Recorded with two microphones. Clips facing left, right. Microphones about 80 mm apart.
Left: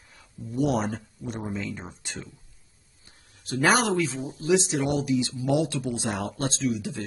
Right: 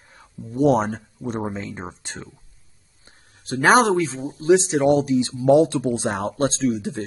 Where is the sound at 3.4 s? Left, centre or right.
Right.